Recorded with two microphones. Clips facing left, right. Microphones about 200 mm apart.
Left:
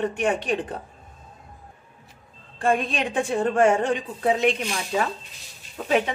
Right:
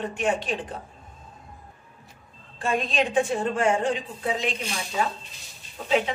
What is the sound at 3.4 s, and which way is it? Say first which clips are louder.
Speech: left 4 dB; 60° left (ahead or behind).